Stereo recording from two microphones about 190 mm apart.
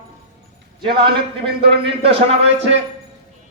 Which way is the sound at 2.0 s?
30° right (ahead or behind).